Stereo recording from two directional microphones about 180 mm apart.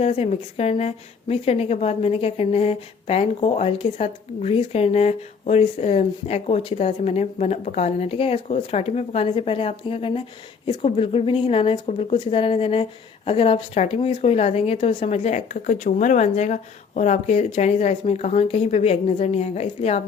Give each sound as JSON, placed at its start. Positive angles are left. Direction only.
{"t": 0.0, "sound": "a woman's voice", "side_deg": 35}